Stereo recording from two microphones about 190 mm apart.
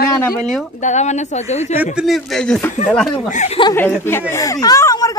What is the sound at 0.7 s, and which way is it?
Speech, 40° left (ahead or behind).